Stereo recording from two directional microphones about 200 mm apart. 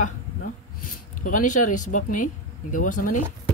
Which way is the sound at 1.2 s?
40° left (ahead or behind).